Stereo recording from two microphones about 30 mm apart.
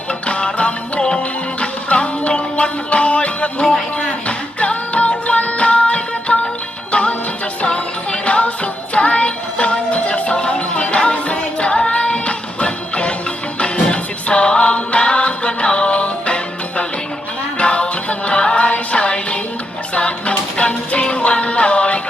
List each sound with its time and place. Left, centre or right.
0.1 s music: left